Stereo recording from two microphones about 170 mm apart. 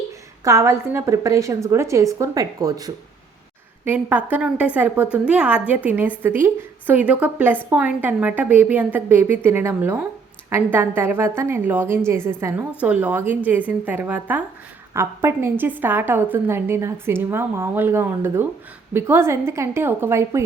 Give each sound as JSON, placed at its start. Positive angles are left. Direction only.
{"t": 0.4, "sound": "a woman's voice", "side_deg": -15}
{"t": 3.8, "sound": "a woman's voice", "side_deg": -10}